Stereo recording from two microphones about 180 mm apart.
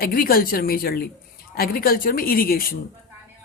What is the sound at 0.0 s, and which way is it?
A woman's voice, 55° left (ahead or behind).